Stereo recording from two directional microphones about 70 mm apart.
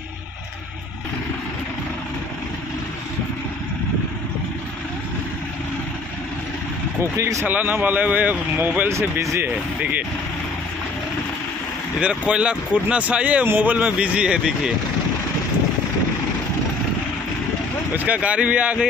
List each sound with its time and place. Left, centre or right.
7.2 s speech: right
7.4 s speech: right
8.9 s speech: right
12.0 s speech: centre
17.9 s speech: right